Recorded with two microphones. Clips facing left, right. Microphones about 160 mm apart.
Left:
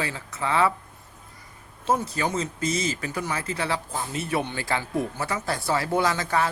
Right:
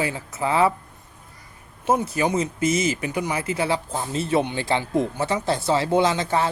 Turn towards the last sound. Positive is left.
turn(degrees=-25)  # may be behind; listen again after turning